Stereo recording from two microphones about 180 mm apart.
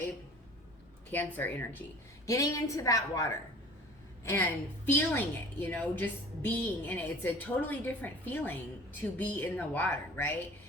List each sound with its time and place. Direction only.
1.1 s a woman's voice: 10° left (ahead or behind)
4.9 s a woman's voice: 10° left (ahead or behind)